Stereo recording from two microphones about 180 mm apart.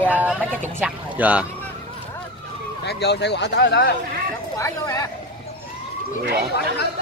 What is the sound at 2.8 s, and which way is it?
Speech, 70° left (ahead or behind).